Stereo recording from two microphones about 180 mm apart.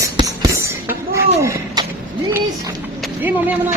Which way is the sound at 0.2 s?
15° right (ahead or behind).